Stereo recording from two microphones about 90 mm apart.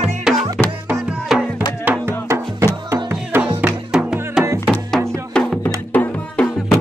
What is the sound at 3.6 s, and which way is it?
Music, 10° right (ahead or behind).